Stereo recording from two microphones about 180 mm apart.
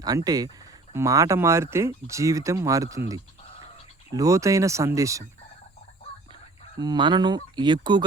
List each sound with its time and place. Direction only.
0.0 s speech: 20° right (ahead or behind)
6.7 s speech: 25° right (ahead or behind)